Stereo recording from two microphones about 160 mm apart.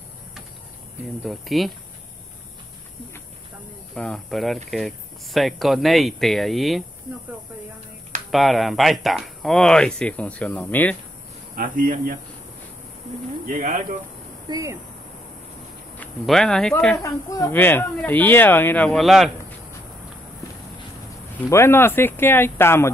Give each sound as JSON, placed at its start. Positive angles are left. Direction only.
{"t": 1.2, "sound": "speech", "side_deg": 0}
{"t": 3.9, "sound": "speech", "side_deg": 5}
{"t": 8.3, "sound": "speech", "side_deg": 0}
{"t": 11.5, "sound": "speech", "side_deg": -60}
{"t": 13.5, "sound": "speech", "side_deg": -60}
{"t": 14.5, "sound": "speech", "side_deg": -20}
{"t": 16.0, "sound": "speech", "side_deg": 5}
{"t": 17.0, "sound": "speech", "side_deg": 20}
{"t": 18.9, "sound": "speech", "side_deg": 0}
{"t": 21.5, "sound": "speech", "side_deg": 15}